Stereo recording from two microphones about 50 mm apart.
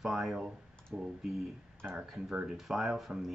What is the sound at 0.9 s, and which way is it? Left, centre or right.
Speech, centre.